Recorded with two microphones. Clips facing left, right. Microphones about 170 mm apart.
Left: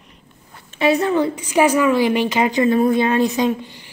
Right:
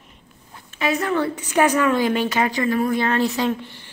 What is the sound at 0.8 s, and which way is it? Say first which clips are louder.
A woman's voice: left 5 dB; 25° left (ahead or behind).